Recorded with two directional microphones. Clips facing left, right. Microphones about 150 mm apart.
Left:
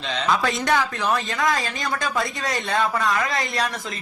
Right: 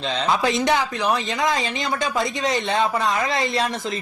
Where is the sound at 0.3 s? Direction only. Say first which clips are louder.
Right 1 dB; 20° right (ahead or behind).